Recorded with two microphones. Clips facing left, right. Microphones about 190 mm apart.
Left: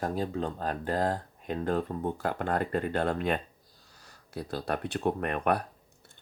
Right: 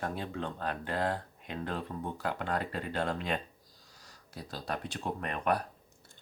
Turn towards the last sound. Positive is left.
turn(degrees=55)  # may be behind; listen again after turning